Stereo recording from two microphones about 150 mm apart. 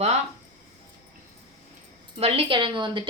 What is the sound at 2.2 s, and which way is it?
Speech, 40° right (ahead or behind).